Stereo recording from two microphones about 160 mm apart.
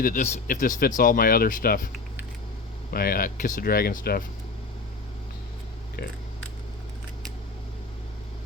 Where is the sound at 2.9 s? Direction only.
70° left (ahead or behind).